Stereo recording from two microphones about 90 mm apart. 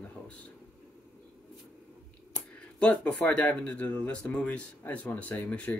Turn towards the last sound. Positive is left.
turn(degrees=15)  # may be behind; listen again after turning